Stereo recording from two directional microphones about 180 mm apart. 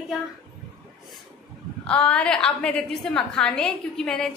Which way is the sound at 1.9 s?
5° left (ahead or behind).